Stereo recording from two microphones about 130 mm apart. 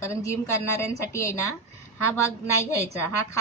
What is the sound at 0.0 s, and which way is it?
A woman's voice, 20° left (ahead or behind).